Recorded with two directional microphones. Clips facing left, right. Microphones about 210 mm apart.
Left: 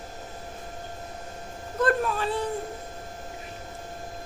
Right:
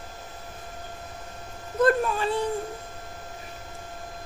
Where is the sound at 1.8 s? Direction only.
Centre (ahead or behind).